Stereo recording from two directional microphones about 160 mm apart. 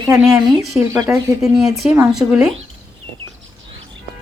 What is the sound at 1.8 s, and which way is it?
Speech, 5° right (ahead or behind).